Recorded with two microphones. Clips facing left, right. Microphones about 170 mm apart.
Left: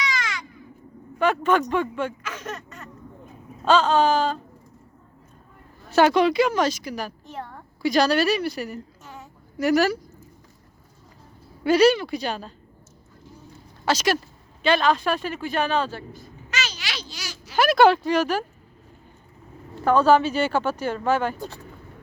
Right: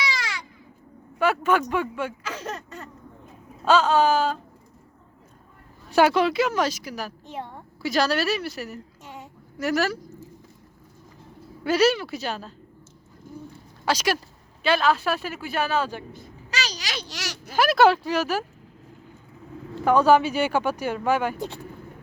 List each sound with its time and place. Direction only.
0.1 s baby cry: 30° right (ahead or behind)
1.2 s speech: 10° right (ahead or behind)
2.2 s a sound: 30° right (ahead or behind)
3.6 s speech: 10° right (ahead or behind)
5.9 s a woman's voice: 10° right (ahead or behind)
11.6 s a woman's voice: 5° right (ahead or behind)
13.3 s a sound: 50° right (ahead or behind)
13.8 s speech: 10° right (ahead or behind)
16.5 s a sound: 35° right (ahead or behind)
17.0 s a sound: 80° right
17.6 s speech: 5° right (ahead or behind)
19.8 s speech: 10° right (ahead or behind)